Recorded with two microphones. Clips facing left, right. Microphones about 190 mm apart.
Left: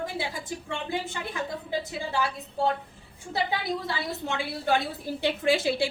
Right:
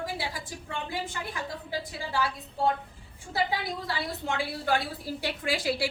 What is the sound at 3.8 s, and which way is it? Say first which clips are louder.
A woman's voice: left 1 dB; 25° left (ahead or behind).